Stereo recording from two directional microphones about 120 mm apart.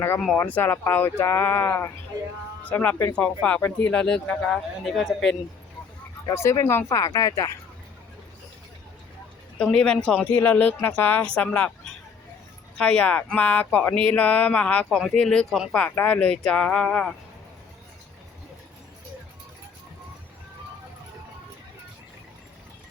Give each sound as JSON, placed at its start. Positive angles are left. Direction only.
{"t": 0.3, "sound": "speech", "side_deg": 15}
{"t": 6.2, "sound": "speech", "side_deg": 20}
{"t": 9.6, "sound": "speech", "side_deg": 5}
{"t": 14.8, "sound": "speech", "side_deg": 0}
{"t": 15.7, "sound": "speech", "side_deg": 10}